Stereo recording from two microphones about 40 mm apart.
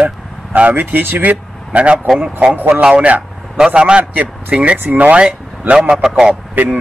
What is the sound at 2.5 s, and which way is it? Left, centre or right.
Speech, right.